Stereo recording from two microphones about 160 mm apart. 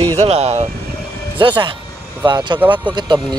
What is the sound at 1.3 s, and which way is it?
Speech, 30° right (ahead or behind).